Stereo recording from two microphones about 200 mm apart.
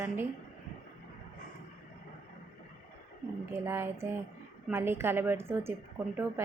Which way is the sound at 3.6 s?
10° right (ahead or behind).